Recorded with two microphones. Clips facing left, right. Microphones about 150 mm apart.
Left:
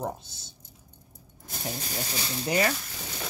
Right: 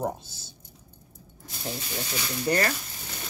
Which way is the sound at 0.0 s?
5° right (ahead or behind).